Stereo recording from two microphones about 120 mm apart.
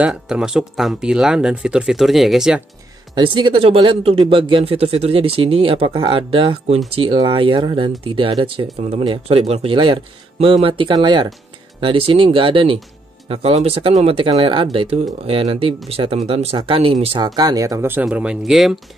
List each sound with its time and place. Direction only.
0.0 s speech: 5° right (ahead or behind)
3.2 s speech: 40° right (ahead or behind)
17.4 s speech: 30° right (ahead or behind); by 18.8 s centre (ahead or behind)